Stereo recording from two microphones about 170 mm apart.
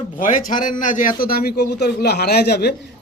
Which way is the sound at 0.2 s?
50° left (ahead or behind).